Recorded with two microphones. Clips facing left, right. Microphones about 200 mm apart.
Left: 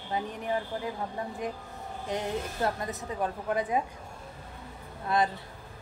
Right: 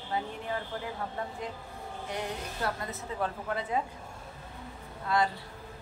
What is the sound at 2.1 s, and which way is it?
A woman's voice, 20° left (ahead or behind).